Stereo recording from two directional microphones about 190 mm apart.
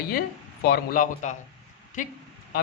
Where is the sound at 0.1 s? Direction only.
50° left (ahead or behind).